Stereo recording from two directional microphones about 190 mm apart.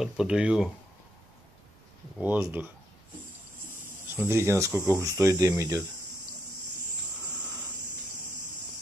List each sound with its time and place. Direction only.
0.0 s speech: 5° right (ahead or behind)
2.1 s speech: 10° right (ahead or behind)
4.2 s speech: 15° right (ahead or behind)